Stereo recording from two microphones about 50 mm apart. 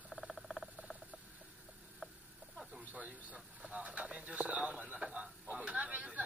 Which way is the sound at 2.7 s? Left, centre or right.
Right.